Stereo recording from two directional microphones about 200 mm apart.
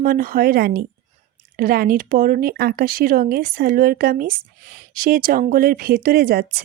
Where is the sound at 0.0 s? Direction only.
45° right (ahead or behind).